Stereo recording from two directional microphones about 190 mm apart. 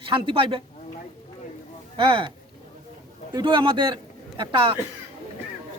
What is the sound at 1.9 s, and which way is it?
Speech, 25° right (ahead or behind).